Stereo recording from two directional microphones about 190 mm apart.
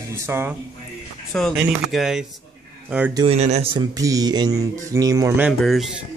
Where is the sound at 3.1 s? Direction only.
30° right (ahead or behind).